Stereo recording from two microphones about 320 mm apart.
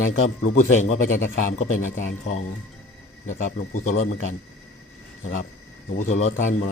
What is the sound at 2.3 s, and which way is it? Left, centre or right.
Speech, left.